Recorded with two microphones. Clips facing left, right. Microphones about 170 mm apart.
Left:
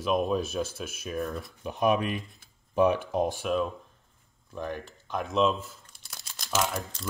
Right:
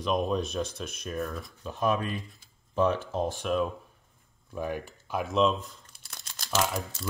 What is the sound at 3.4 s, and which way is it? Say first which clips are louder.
Speech: even; centre (ahead or behind).